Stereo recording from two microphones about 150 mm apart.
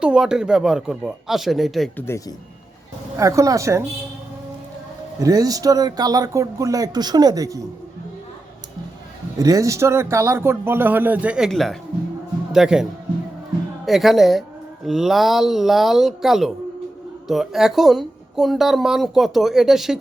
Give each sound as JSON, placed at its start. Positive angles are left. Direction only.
{"t": 0.0, "sound": "a woman's voice", "side_deg": -5}
{"t": 2.0, "sound": "speech", "side_deg": 20}
{"t": 3.2, "sound": "speech", "side_deg": -20}
{"t": 5.2, "sound": "speech", "side_deg": -25}
{"t": 9.4, "sound": "a woman's voice", "side_deg": -25}